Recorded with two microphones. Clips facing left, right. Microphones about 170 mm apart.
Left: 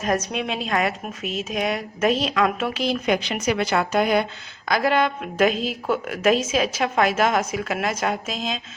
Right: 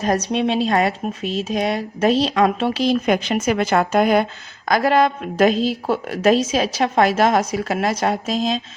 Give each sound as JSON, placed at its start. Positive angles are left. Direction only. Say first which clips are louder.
{"t": 0.0, "sound": "speech", "louder": "right 5 dB", "side_deg": -35}